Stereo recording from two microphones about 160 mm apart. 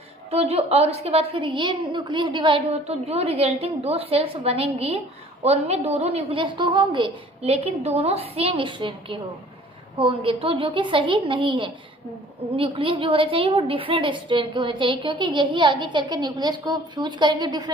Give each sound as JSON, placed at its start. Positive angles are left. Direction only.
{"t": 0.3, "sound": "a woman's voice", "side_deg": -40}